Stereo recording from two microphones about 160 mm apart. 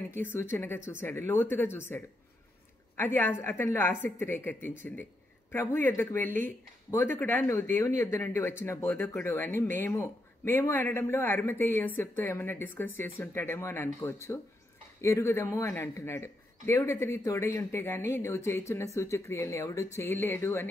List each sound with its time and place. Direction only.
0.1 s speech: 15° left (ahead or behind)